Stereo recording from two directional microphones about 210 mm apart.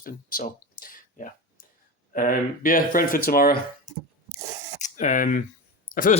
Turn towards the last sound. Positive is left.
turn(degrees=45)  # may be behind; listen again after turning